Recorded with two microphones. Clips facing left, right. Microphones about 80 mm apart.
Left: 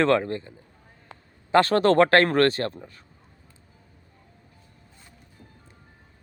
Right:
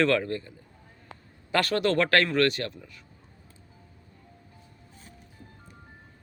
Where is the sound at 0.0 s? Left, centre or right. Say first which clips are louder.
Left 3 dB; left.